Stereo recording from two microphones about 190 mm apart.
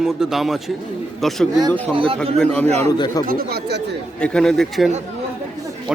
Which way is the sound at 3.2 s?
50° right (ahead or behind).